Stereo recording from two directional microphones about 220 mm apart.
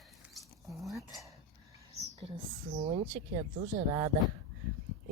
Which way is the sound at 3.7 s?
35° right (ahead or behind).